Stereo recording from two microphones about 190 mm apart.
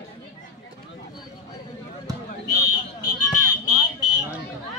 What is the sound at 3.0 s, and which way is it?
Fire alarm, 20° left (ahead or behind).